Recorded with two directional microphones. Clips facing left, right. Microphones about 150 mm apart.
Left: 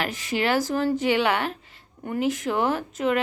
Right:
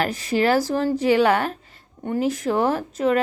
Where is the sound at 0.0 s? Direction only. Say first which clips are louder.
Right 5 dB; 40° right (ahead or behind).